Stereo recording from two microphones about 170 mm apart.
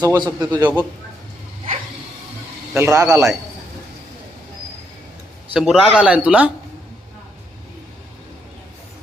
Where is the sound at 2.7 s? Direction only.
15° right (ahead or behind).